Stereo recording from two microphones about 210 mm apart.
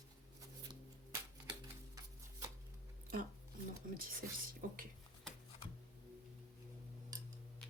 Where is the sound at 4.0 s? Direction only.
40° right (ahead or behind).